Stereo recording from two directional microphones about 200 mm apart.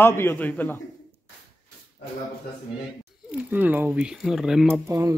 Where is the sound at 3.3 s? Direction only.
10° right (ahead or behind).